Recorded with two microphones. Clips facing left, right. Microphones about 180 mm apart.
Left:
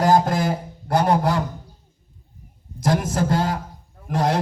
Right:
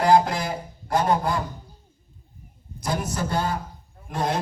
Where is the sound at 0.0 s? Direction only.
45° left (ahead or behind); by 1.4 s 75° left (ahead or behind).